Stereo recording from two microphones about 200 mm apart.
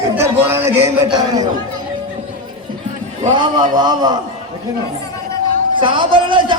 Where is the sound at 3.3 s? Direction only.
20° right (ahead or behind).